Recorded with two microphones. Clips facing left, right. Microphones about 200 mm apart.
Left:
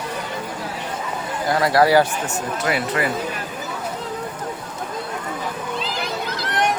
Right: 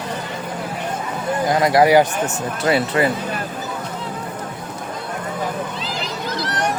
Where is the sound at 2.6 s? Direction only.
30° right (ahead or behind).